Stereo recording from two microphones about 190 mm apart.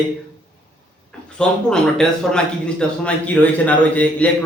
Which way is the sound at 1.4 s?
5° left (ahead or behind).